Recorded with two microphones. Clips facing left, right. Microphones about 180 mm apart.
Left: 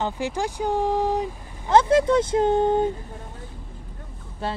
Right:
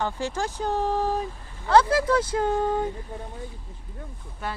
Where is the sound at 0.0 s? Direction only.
15° left (ahead or behind).